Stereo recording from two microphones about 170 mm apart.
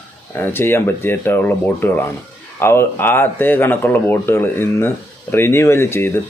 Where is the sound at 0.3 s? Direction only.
15° left (ahead or behind).